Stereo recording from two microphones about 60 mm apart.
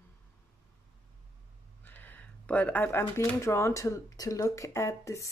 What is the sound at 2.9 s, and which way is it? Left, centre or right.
Speech, left.